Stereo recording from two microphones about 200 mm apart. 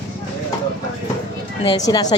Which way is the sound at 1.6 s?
20° left (ahead or behind).